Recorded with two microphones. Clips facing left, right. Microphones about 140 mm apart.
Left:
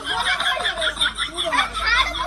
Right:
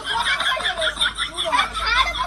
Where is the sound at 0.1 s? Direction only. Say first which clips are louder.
Even; centre (ahead or behind).